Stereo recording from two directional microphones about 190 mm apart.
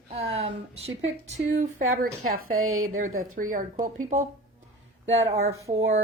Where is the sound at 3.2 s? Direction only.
45° right (ahead or behind).